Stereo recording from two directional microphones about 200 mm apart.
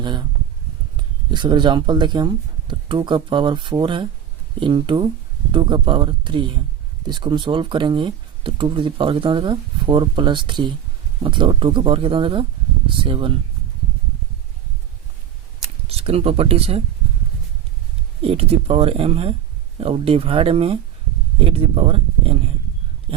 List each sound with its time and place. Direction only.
0.0 s speech: 20° right (ahead or behind)
15.9 s speech: 30° right (ahead or behind)
18.2 s speech: 30° right (ahead or behind)
23.1 s a sound: 25° right (ahead or behind)